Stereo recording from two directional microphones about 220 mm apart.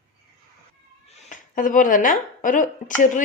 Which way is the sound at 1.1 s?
35° left (ahead or behind).